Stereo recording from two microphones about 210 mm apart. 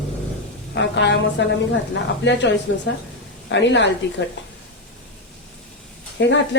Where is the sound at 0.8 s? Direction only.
55° left (ahead or behind).